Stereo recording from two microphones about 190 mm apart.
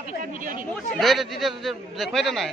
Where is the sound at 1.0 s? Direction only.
Centre (ahead or behind).